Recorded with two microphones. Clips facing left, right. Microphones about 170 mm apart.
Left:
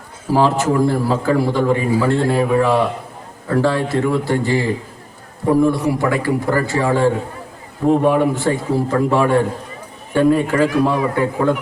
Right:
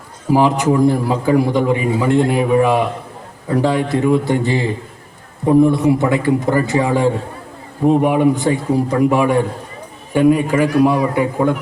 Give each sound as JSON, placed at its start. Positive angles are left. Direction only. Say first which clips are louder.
{"t": 0.3, "sound": "a man's voice", "louder": "right 2 dB", "side_deg": -15}